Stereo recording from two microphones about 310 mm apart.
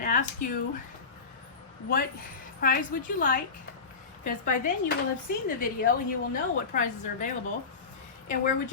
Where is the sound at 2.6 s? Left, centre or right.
Left.